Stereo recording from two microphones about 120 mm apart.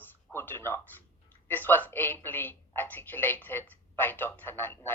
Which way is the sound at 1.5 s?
15° left (ahead or behind).